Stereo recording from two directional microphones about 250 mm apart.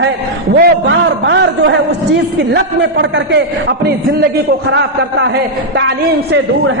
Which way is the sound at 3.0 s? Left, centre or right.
Right.